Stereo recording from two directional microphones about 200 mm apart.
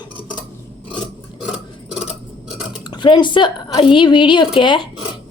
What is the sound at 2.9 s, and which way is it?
A woman's voice, 25° left (ahead or behind).